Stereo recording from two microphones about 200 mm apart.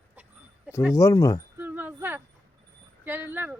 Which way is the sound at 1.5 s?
10° right (ahead or behind).